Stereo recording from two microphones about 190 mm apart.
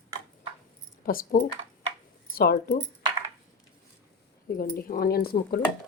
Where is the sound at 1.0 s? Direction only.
50° left (ahead or behind).